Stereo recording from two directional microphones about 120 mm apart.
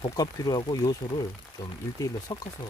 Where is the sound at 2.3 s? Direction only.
30° left (ahead or behind).